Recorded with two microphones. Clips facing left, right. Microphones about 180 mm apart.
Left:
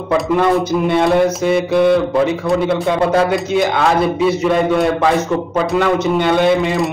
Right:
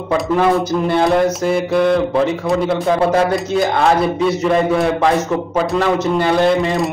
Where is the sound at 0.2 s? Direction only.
Centre (ahead or behind).